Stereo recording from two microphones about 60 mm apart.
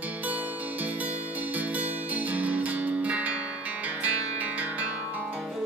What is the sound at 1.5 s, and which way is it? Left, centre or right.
Music, right.